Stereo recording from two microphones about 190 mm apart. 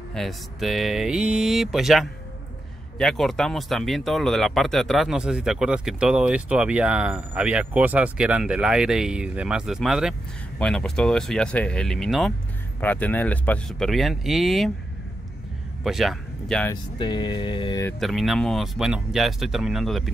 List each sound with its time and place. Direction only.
0.1 s speech: centre (ahead or behind)
15.8 s speech: centre (ahead or behind)
17.0 s mantra: 25° left (ahead or behind)
17.8 s speech: centre (ahead or behind)